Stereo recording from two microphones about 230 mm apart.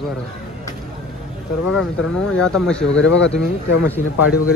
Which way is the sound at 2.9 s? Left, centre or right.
Left.